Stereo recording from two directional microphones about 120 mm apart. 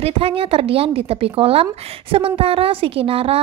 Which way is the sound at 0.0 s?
50° right (ahead or behind).